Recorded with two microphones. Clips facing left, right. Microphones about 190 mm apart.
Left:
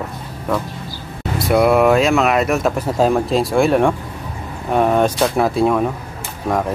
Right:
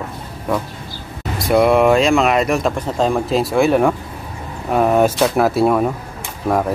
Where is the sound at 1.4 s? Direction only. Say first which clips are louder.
Even; centre (ahead or behind).